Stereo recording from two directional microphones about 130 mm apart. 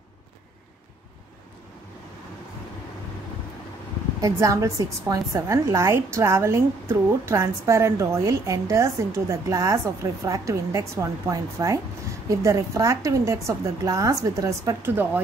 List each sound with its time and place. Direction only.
4.2 s a woman's voice: 25° right (ahead or behind)